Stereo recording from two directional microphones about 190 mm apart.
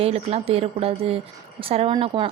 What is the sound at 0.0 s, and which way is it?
A woman's voice, 35° right (ahead or behind).